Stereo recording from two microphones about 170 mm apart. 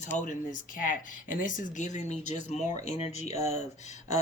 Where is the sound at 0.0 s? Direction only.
45° left (ahead or behind).